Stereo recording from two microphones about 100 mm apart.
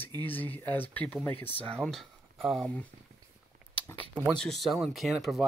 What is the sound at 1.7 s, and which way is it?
Speech, 5° left (ahead or behind).